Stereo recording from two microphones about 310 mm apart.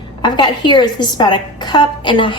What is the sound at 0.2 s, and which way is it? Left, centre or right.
A woman's voice, centre.